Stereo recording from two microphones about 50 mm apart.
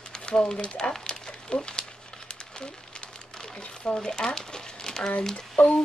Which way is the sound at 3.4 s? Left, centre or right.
Centre.